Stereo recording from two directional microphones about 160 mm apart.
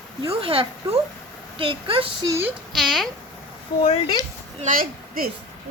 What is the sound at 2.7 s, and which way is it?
Speech, centre (ahead or behind).